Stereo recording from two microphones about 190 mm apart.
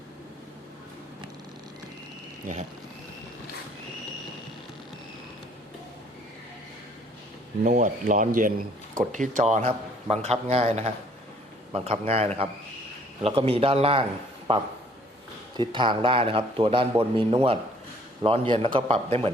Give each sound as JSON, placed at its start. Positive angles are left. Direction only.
{"t": 7.6, "sound": "a man's voice", "side_deg": -45}